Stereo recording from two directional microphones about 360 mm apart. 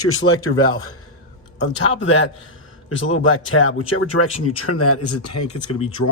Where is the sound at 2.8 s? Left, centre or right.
Left.